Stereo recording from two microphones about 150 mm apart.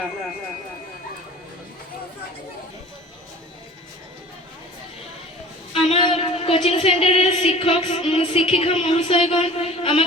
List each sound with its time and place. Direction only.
5.9 s speech: 40° left (ahead or behind)